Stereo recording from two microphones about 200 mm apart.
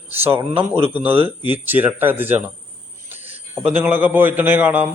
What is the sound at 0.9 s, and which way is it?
A man's voice, 10° right (ahead or behind).